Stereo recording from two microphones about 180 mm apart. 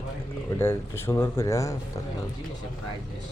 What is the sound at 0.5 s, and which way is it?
Speech, 15° left (ahead or behind).